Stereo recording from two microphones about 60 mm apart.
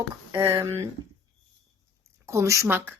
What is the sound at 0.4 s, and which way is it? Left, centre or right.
Speech, right.